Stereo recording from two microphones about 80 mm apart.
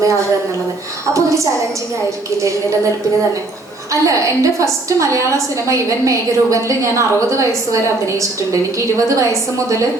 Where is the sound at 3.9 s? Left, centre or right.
Right.